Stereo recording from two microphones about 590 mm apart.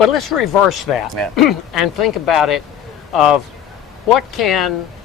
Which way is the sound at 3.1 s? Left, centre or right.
Left.